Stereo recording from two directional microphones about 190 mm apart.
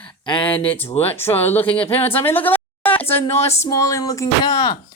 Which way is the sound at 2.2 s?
10° left (ahead or behind).